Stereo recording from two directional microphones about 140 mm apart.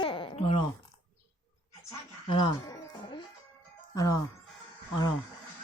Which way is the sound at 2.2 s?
40° left (ahead or behind).